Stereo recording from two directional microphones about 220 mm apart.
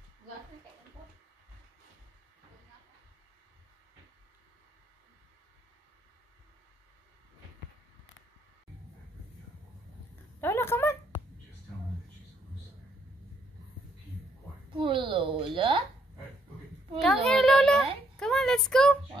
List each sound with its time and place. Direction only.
10.4 s a sound: 10° left (ahead or behind)
14.8 s a woman's voice: 20° right (ahead or behind)
17.0 s a child's voice: centre (ahead or behind)